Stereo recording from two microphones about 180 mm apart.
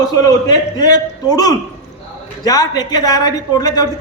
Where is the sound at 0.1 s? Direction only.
20° left (ahead or behind).